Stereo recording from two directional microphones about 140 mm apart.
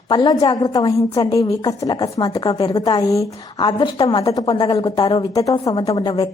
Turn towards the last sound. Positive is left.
turn(degrees=30)  # may be behind; listen again after turning